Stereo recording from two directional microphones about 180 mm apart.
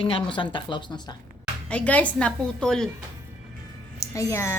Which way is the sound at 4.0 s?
15° left (ahead or behind).